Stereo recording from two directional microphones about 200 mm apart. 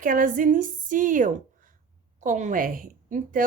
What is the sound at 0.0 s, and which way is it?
A woman's voice, 40° right (ahead or behind).